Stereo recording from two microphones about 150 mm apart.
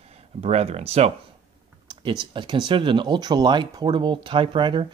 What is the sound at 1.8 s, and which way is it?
Speech, 35° right (ahead or behind).